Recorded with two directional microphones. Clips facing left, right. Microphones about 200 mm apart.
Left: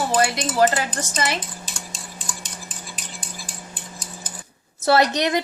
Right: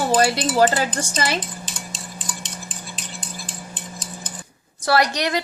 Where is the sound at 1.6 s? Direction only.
10° left (ahead or behind).